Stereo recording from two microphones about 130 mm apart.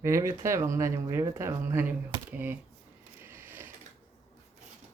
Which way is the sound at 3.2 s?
20° right (ahead or behind).